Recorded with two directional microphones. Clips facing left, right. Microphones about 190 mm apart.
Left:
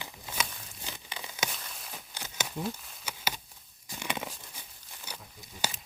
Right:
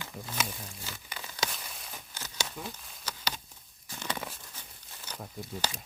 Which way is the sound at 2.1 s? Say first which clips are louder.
Left 2 dB; 15° left (ahead or behind).